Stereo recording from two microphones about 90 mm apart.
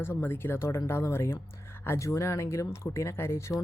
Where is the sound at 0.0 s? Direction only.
25° left (ahead or behind).